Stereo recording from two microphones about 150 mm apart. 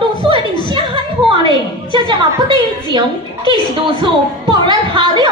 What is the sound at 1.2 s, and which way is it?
A woman's voice, 30° right (ahead or behind).